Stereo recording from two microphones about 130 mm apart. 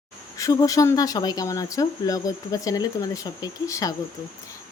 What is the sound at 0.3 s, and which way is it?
Speech, 25° left (ahead or behind).